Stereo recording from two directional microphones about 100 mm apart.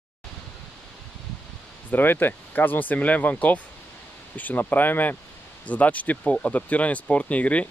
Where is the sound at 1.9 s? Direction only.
20° left (ahead or behind).